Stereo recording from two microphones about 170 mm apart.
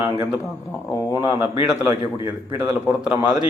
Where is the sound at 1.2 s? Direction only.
15° right (ahead or behind).